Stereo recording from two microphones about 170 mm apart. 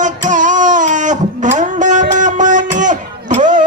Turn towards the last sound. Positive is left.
turn(degrees=-45)  # may be behind; listen again after turning